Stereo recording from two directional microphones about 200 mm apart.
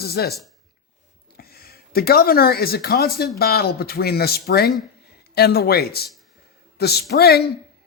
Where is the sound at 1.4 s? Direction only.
50° left (ahead or behind).